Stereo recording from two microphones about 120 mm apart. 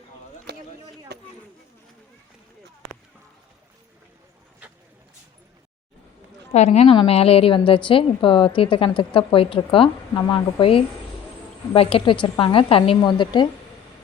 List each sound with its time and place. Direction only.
6.5 s a woman's voice: 65° left (ahead or behind)
6.9 s a woman's voice: 50° left (ahead or behind)
10.2 s a woman's voice: 40° left (ahead or behind)